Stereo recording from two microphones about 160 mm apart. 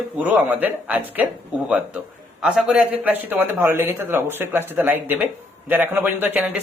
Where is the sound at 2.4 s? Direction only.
5° right (ahead or behind).